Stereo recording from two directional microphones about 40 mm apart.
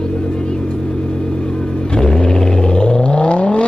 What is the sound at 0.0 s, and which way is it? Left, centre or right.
Vehicle, centre.